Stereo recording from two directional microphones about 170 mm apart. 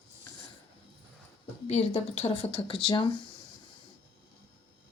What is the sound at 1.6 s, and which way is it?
Speech, 40° left (ahead or behind).